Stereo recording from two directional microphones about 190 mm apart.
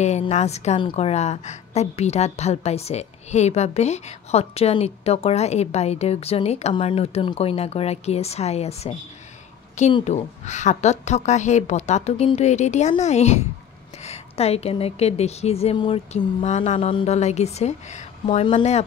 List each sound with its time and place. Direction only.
0.0 s a woman's voice: 35° left (ahead or behind)
9.9 s a woman's voice: 35° left (ahead or behind)